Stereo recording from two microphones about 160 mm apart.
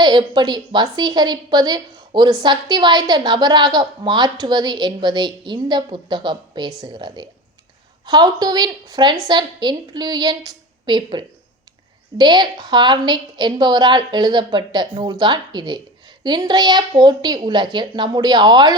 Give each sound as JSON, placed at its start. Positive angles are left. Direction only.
{"t": 0.0, "sound": "a woman's voice", "side_deg": -30}